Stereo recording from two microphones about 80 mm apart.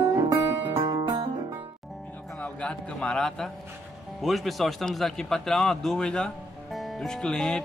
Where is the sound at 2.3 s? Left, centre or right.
Centre.